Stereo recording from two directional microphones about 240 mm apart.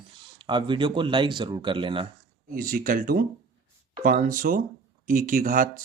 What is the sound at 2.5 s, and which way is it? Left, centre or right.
Speech, right.